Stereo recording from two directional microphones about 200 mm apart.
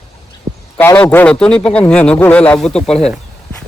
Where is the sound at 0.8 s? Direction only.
10° left (ahead or behind).